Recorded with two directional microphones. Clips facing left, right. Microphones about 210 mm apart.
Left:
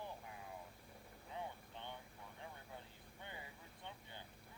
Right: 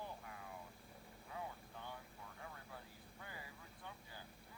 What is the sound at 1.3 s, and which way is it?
Vehicle, 25° left (ahead or behind).